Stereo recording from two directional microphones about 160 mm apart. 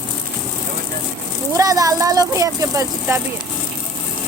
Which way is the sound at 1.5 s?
20° right (ahead or behind).